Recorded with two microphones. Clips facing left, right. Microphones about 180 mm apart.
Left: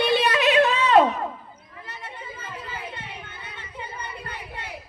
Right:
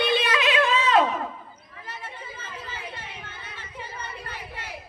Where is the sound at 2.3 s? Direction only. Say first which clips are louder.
Left 2 dB; 55° left (ahead or behind).